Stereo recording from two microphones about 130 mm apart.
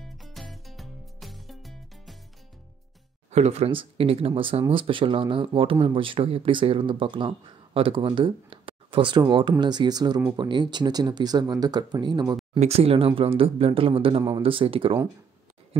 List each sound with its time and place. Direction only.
0.0 s music: centre (ahead or behind)
3.3 s speech: 60° right (ahead or behind); by 12.4 s 30° right (ahead or behind)
12.5 s speech: 50° right (ahead or behind)